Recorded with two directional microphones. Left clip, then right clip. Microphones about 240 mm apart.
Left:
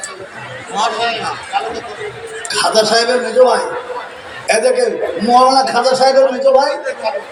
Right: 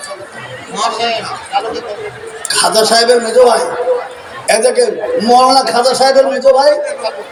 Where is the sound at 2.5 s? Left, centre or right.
Right.